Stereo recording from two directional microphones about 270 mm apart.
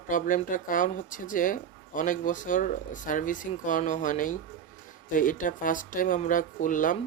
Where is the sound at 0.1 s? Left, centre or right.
Left.